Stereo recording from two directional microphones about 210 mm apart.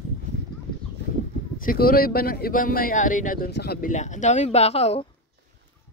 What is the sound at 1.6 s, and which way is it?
Speech, 45° left (ahead or behind).